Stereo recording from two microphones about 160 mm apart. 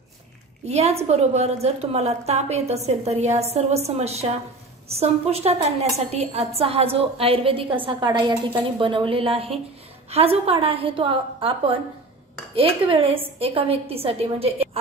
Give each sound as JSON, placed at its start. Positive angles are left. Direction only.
{"t": 0.7, "sound": "a woman's voice", "side_deg": -40}